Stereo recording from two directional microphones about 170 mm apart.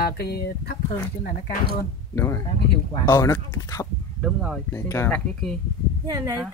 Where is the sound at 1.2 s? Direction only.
55° left (ahead or behind).